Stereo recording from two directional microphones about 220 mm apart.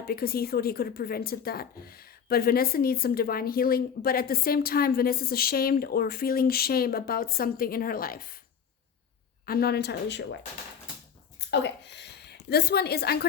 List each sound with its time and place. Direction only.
0.0 s a woman's voice: 45° left (ahead or behind)
9.5 s a woman's voice: 45° left (ahead or behind)
11.3 s a sound: 50° left (ahead or behind)